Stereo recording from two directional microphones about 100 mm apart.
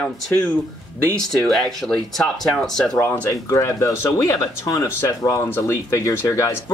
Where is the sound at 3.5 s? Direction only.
30° left (ahead or behind).